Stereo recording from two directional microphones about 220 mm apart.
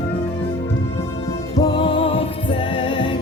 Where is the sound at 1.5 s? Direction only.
20° left (ahead or behind).